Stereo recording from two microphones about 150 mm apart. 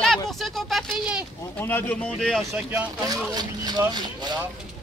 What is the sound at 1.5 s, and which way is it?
Speech, 10° left (ahead or behind).